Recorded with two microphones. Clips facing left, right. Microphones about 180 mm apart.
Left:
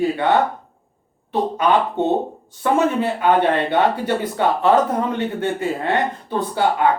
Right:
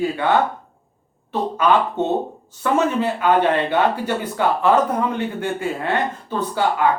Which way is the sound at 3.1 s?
20° left (ahead or behind).